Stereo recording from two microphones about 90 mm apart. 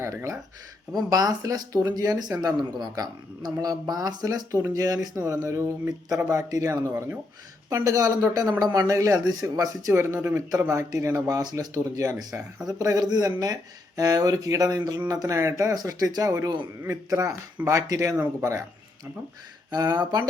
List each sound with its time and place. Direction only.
0.0 s speech: 30° right (ahead or behind)
1.1 s speech: 45° right (ahead or behind); by 6.2 s 25° right (ahead or behind)
6.3 s speech: 40° right (ahead or behind)
9.9 s speech: 25° right (ahead or behind)
19.7 s speech: 50° right (ahead or behind)